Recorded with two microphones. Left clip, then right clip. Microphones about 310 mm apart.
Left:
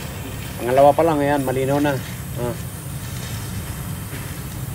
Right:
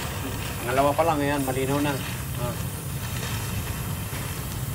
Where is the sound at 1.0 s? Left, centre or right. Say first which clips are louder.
Left 5 dB; right.